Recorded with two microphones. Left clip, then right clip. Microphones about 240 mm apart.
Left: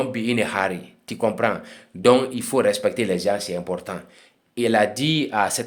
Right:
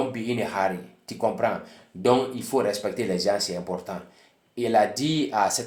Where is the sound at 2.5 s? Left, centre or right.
Left.